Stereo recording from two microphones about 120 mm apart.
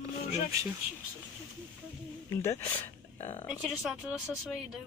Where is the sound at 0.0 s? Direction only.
30° right (ahead or behind).